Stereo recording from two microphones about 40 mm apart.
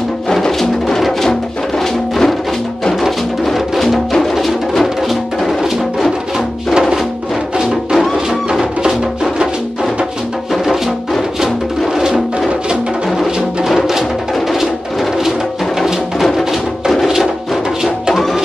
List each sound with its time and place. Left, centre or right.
0.3 s music: centre
5.6 s music: centre
11.9 s music: centre
13.7 s music: centre
15.8 s music: centre
17.0 s music: centre